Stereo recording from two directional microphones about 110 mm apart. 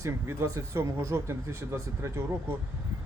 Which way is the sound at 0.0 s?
30° right (ahead or behind).